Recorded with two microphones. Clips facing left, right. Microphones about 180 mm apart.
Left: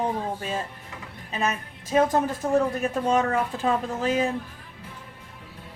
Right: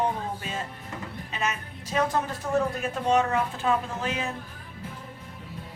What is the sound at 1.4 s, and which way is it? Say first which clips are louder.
A woman's voice: left 4 dB; 40° left (ahead or behind).